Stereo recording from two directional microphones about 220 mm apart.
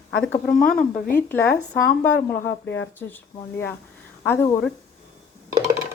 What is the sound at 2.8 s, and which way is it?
Speech, 10° left (ahead or behind).